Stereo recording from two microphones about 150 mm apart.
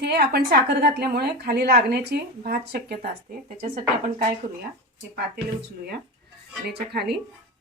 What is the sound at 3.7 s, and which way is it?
Speech, 65° right (ahead or behind).